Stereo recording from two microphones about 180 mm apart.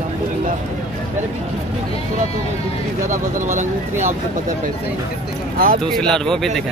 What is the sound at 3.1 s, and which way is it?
Speech, 40° right (ahead or behind).